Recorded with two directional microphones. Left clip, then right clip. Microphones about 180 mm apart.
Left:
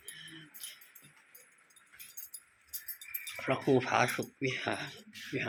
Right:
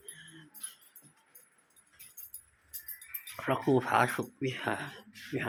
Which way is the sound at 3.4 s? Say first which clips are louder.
Right 1 dB; 20° right (ahead or behind).